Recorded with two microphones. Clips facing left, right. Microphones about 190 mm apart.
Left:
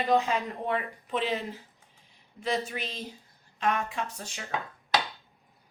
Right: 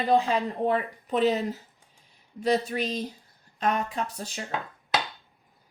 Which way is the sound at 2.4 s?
40° right (ahead or behind).